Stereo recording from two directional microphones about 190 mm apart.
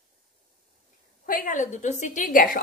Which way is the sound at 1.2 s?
45° left (ahead or behind).